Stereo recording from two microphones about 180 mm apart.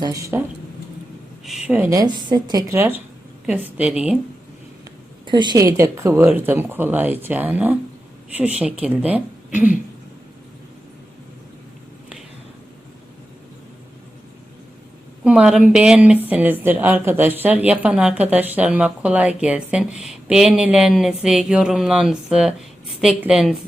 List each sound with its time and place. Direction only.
0.0 s speech: 15° right (ahead or behind)
1.5 s speech: 5° right (ahead or behind)
5.2 s speech: 25° right (ahead or behind); by 9.6 s 10° right (ahead or behind)
15.2 s a woman's voice: 5° right (ahead or behind)